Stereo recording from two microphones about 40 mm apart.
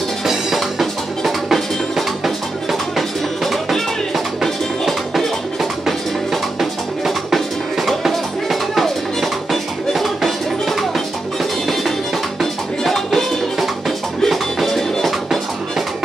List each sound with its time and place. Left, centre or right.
0.2 s music: centre
12.4 s music: centre